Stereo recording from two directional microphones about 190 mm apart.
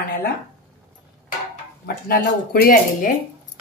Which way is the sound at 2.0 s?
55° left (ahead or behind).